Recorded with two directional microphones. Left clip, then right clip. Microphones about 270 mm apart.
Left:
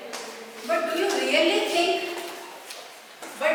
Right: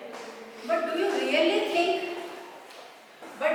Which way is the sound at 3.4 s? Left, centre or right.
Centre.